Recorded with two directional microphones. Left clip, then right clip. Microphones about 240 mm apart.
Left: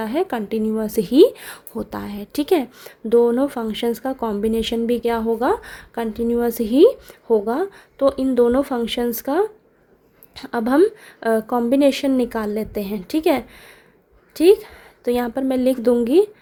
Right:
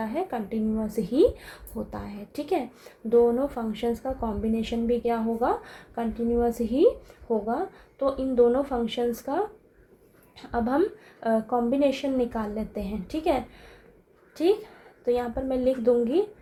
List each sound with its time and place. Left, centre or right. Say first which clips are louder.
0.0 s a woman's voice: left 7 dB; left